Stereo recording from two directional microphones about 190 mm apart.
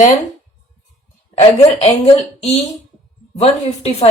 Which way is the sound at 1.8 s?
35° left (ahead or behind).